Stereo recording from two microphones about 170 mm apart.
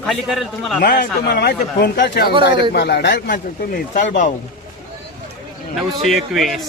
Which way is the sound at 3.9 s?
50° left (ahead or behind).